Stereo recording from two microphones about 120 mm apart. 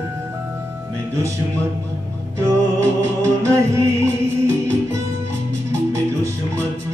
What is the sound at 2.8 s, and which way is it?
Music, 25° right (ahead or behind).